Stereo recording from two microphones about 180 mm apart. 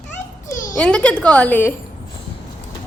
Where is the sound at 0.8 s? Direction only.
5° left (ahead or behind).